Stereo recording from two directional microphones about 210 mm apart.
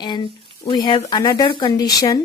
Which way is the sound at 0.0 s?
20° left (ahead or behind).